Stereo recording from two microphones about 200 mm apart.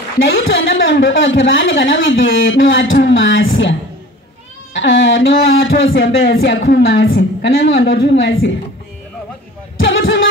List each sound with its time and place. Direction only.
0.2 s speech: 75° left (ahead or behind)
4.7 s speech: 70° left (ahead or behind)
9.8 s music: 70° left (ahead or behind)